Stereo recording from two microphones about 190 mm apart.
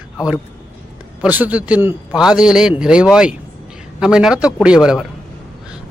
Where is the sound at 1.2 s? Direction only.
10° right (ahead or behind).